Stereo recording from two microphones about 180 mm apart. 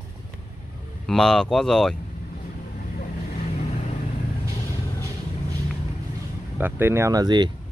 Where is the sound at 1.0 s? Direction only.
5° left (ahead or behind).